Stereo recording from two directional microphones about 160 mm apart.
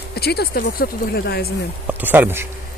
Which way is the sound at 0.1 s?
85° left.